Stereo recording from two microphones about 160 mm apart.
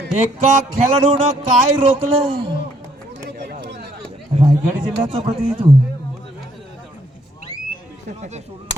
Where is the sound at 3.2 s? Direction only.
90° right.